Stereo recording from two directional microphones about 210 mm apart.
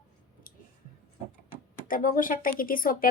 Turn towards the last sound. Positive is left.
turn(degrees=40)  # may be behind; listen again after turning